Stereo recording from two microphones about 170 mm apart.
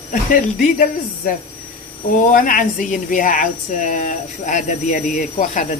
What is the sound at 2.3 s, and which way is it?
Speech, 55° left (ahead or behind).